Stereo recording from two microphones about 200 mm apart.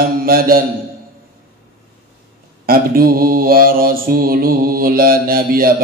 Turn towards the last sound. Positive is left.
turn(degrees=-45)  # may be behind; listen again after turning